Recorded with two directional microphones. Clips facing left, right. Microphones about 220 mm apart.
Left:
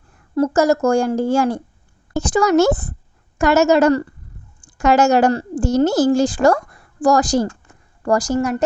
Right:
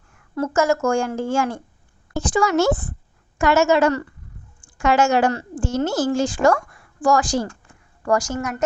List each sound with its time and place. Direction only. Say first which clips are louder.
0.1 s a woman's voice: left 6 dB; 35° left (ahead or behind)